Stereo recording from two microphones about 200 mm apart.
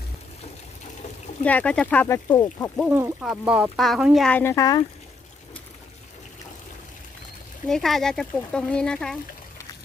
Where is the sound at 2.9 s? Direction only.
10° right (ahead or behind); by 4.8 s 20° left (ahead or behind).